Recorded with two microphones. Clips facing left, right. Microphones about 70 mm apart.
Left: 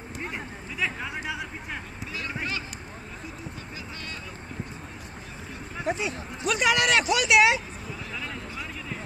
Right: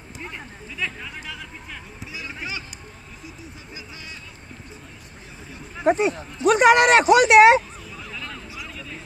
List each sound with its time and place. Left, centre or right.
0.2 s a sound: centre
5.9 s speech: right
8.1 s vehicle: centre